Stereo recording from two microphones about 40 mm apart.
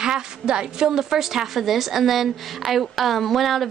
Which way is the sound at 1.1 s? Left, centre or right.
Centre.